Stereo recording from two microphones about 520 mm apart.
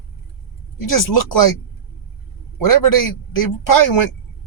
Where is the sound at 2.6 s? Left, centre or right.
Left.